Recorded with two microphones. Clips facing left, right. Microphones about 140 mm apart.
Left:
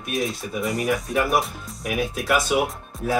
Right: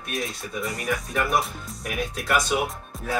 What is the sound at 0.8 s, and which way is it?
Speech, 20° left (ahead or behind).